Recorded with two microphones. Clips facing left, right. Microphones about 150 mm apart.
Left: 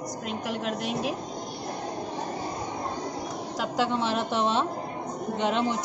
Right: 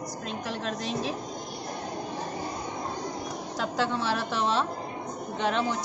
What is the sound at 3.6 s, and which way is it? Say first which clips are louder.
A woman's voice: left 1 dB; 15° left (ahead or behind).